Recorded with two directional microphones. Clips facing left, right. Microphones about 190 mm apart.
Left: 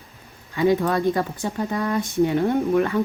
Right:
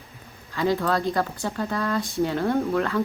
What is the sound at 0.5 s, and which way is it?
Speech, 20° left (ahead or behind).